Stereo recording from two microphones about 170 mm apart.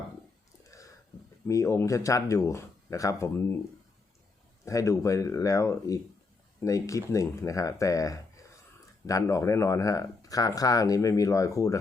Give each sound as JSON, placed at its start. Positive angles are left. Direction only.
{"t": 0.6, "sound": "a sound", "side_deg": 20}
{"t": 1.5, "sound": "speech", "side_deg": 20}
{"t": 4.6, "sound": "speech", "side_deg": 20}